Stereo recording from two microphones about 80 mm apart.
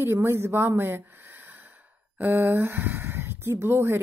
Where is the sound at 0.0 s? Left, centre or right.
Right.